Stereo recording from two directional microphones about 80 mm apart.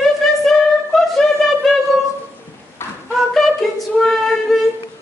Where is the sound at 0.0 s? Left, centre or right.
Centre.